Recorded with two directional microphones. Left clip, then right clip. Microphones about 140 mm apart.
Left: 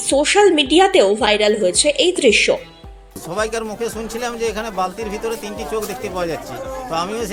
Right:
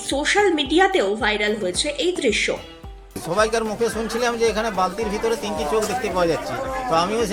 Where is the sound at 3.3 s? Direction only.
40° left (ahead or behind).